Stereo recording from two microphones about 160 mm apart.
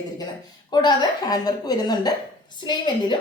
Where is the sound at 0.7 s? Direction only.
25° left (ahead or behind).